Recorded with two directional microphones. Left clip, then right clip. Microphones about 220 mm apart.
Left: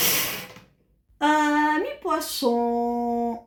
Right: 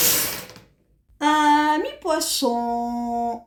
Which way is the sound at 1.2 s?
55° right (ahead or behind).